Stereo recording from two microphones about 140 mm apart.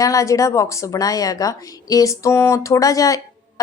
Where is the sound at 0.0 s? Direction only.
25° left (ahead or behind).